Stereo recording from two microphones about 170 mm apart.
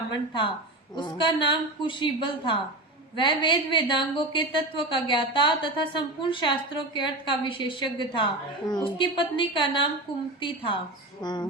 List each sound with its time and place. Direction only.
0.1 s a woman's voice: 30° left (ahead or behind)